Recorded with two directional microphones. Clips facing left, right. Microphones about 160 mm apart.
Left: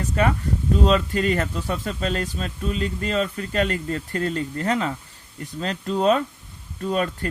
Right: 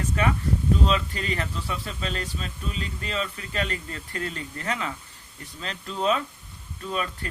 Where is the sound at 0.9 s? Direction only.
40° left (ahead or behind).